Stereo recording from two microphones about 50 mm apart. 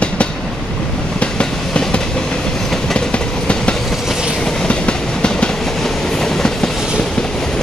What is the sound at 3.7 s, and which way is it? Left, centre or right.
Train, centre.